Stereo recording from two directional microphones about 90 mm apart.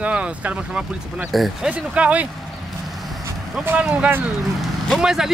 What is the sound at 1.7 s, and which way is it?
Speech, 15° right (ahead or behind).